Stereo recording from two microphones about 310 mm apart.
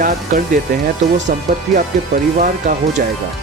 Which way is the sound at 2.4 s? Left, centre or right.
Right.